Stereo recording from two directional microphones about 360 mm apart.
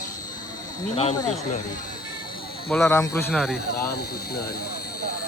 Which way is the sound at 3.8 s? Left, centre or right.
Left.